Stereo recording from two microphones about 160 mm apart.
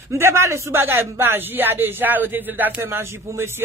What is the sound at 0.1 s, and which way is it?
Speech, 15° right (ahead or behind).